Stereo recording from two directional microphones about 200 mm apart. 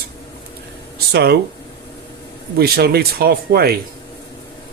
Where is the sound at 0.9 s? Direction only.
55° right (ahead or behind).